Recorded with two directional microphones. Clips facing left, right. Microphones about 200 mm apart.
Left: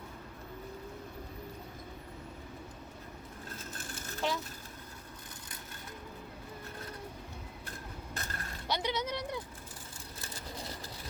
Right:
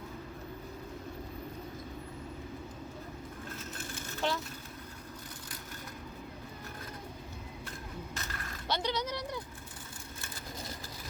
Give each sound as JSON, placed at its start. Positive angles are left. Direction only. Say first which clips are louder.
{"t": 4.2, "sound": "speech", "louder": "right 1 dB", "side_deg": 5}
{"t": 8.1, "sound": "mechanisms", "louder": "even", "side_deg": 40}
{"t": 8.6, "sound": "speech", "louder": "even", "side_deg": 15}
{"t": 10.2, "sound": "vehicle", "louder": "left 1 dB", "side_deg": 35}